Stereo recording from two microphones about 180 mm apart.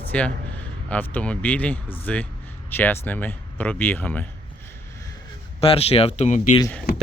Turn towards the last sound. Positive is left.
turn(degrees=50)  # may be behind; listen again after turning